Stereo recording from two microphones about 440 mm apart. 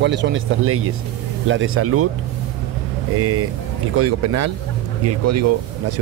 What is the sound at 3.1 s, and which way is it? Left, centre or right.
Speech, right.